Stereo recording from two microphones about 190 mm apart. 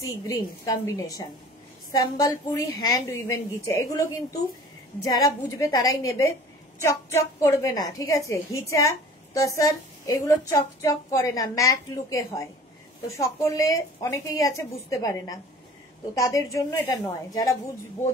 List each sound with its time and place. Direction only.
0.3 s a woman's voice: 20° left (ahead or behind)